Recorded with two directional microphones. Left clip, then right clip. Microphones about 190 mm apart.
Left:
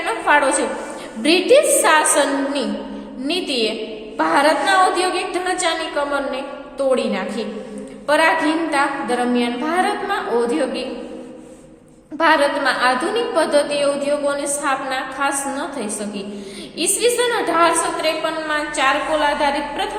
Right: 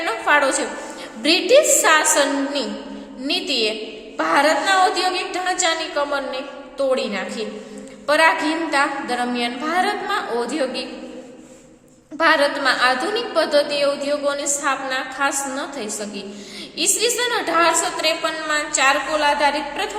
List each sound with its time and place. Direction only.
0.0 s a sound: 15° right (ahead or behind)
1.2 s a woman's voice: 10° right (ahead or behind)
12.1 s a woman's voice: 15° right (ahead or behind)
18.4 s a woman's voice: 30° right (ahead or behind)